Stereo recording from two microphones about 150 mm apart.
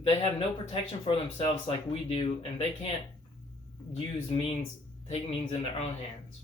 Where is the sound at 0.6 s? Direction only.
40° left (ahead or behind).